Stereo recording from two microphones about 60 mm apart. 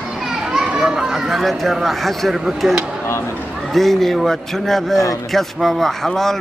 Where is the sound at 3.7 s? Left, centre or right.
Centre.